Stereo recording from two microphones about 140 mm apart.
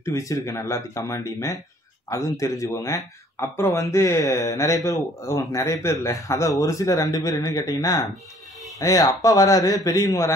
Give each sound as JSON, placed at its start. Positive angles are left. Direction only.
{"t": 0.0, "sound": "speech", "side_deg": 20}